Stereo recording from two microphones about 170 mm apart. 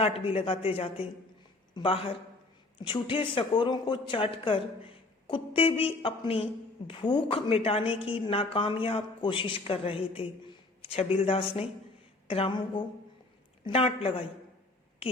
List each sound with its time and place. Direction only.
0.0 s a woman's voice: 35° left (ahead or behind)